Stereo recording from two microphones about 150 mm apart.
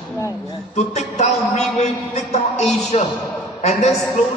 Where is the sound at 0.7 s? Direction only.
50° left (ahead or behind).